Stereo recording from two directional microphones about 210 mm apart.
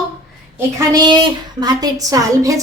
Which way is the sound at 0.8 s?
20° right (ahead or behind).